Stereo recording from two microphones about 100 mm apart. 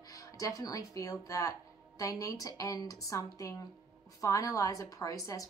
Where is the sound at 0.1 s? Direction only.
35° left (ahead or behind).